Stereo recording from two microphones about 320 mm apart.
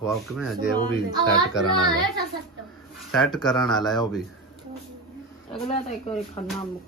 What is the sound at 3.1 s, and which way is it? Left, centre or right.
Speech, centre.